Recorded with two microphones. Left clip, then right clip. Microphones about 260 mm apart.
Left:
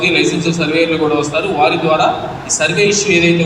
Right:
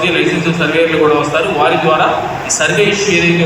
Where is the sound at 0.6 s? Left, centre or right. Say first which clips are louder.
Right 3 dB; left.